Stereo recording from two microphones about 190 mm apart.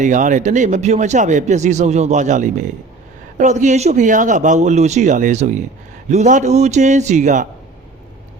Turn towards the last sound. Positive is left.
turn(degrees=-40)  # may be behind; listen again after turning